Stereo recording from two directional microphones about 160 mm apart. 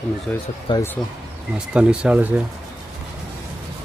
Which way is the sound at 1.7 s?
5° right (ahead or behind).